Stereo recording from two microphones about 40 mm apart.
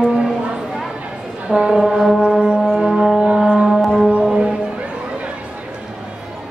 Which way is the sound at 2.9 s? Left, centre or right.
Centre.